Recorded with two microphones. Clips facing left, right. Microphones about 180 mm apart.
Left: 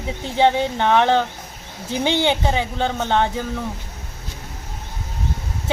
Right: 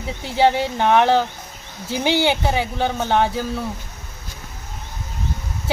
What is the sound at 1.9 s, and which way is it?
Speech, 20° left (ahead or behind).